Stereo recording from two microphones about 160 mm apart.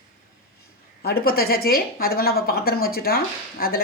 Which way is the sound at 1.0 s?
75° left (ahead or behind).